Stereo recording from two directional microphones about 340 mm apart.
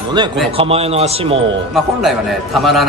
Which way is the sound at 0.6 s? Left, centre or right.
Centre.